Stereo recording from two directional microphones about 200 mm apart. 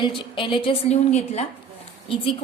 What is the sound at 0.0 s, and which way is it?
A woman's voice, 25° left (ahead or behind).